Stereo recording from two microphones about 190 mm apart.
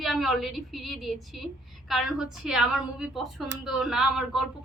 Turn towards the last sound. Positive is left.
turn(degrees=-5)  # may be behind; listen again after turning